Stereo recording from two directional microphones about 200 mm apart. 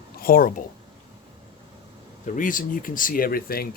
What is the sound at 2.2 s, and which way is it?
Speech, 40° left (ahead or behind).